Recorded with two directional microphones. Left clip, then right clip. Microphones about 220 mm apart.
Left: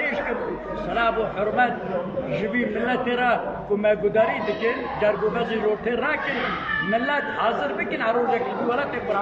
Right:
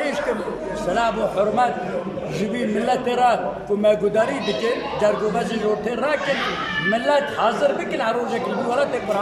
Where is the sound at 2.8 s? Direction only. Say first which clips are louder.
Right 5 dB; 25° right (ahead or behind).